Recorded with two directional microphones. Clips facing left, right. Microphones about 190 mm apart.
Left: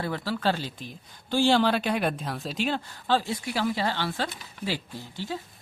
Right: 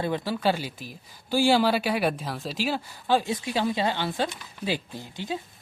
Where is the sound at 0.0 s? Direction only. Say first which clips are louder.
Right 2 dB; 20° right (ahead or behind).